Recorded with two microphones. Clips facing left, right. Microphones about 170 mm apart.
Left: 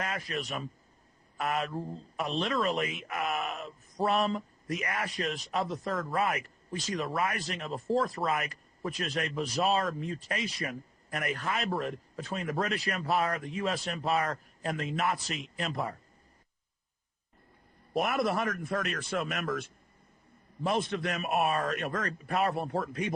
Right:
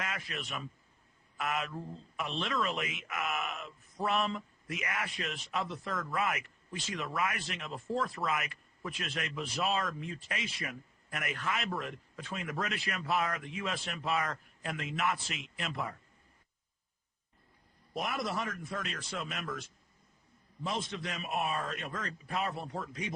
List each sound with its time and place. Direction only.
0.0 s a man's voice: 35° left (ahead or behind)
17.9 s speech: 55° left (ahead or behind)